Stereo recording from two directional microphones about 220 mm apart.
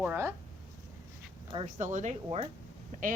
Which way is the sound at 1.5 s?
30° right (ahead or behind).